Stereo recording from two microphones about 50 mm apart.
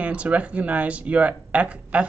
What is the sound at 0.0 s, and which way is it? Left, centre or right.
Speech, right.